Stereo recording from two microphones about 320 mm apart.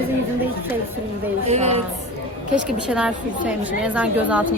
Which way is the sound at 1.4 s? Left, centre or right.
Centre.